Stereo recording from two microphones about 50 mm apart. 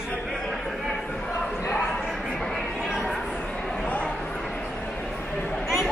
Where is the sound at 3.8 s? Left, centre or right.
Left.